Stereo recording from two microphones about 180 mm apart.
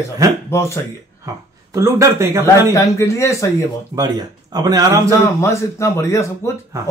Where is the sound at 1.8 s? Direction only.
15° right (ahead or behind).